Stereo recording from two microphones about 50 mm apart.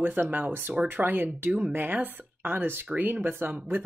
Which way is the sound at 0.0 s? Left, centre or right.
Right.